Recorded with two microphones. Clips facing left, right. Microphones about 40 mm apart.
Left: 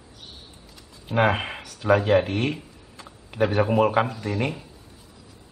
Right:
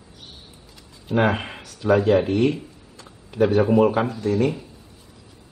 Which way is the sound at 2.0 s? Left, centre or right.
Centre.